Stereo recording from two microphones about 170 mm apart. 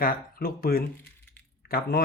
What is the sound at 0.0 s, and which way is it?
Speech, 60° left (ahead or behind).